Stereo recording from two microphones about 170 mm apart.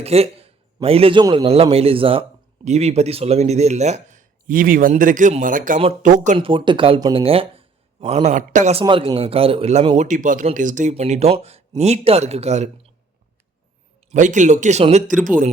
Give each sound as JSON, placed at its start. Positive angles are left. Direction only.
{"t": 0.0, "sound": "a man's voice", "side_deg": -35}
{"t": 1.2, "sound": "a man's voice", "side_deg": -25}
{"t": 1.5, "sound": "speech", "side_deg": -35}
{"t": 6.4, "sound": "speech", "side_deg": -30}
{"t": 8.8, "sound": "speech", "side_deg": -25}
{"t": 10.1, "sound": "speech", "side_deg": -50}
{"t": 14.1, "sound": "speech", "side_deg": -45}
{"t": 15.2, "sound": "speech", "side_deg": -50}